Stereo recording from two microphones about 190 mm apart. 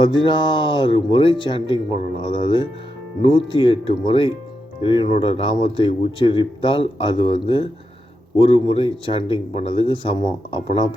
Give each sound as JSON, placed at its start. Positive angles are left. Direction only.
{"t": 0.0, "sound": "speech", "side_deg": 25}